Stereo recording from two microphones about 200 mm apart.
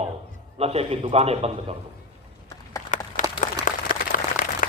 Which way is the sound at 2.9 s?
40° left (ahead or behind).